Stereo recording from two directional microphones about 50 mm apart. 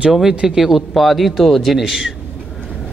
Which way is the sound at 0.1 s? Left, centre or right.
Centre.